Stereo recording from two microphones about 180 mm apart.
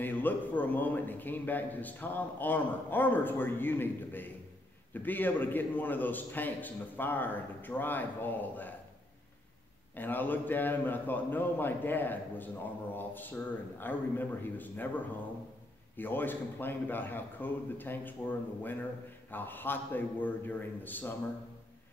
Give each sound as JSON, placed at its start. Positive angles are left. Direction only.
{"t": 0.0, "sound": "a man's voice", "side_deg": 10}
{"t": 9.9, "sound": "a man's voice", "side_deg": 10}
{"t": 16.0, "sound": "a man's voice", "side_deg": 10}